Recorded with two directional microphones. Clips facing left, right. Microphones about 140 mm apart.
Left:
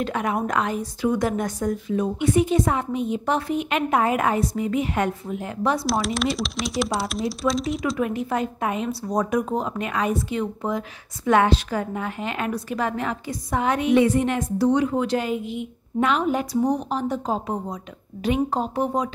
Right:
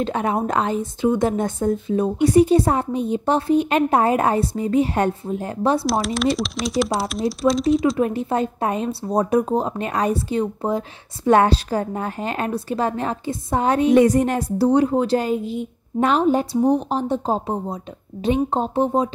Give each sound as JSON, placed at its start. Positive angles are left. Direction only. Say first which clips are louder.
{"t": 0.0, "sound": "speech", "louder": "right 3 dB", "side_deg": -30}
{"t": 5.9, "sound": "speech", "louder": "right 3 dB", "side_deg": 0}
{"t": 8.0, "sound": "speech", "louder": "right 4 dB", "side_deg": -30}